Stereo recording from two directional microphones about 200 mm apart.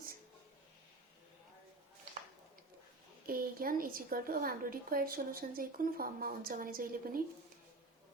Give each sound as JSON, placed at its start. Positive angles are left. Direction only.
{"t": 3.2, "sound": "a woman's voice", "side_deg": -45}